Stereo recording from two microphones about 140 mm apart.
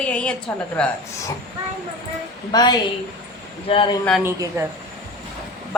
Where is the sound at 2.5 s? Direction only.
30° left (ahead or behind).